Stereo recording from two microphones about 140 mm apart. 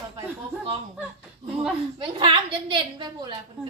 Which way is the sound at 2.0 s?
35° right (ahead or behind).